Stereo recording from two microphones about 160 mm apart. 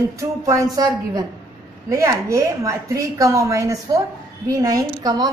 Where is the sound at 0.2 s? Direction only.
20° right (ahead or behind).